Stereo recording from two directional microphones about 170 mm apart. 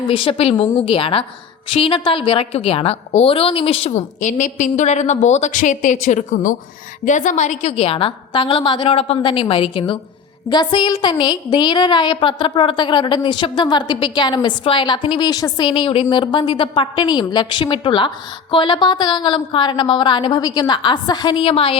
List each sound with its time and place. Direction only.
0.0 s a woman's voice: 30° left (ahead or behind)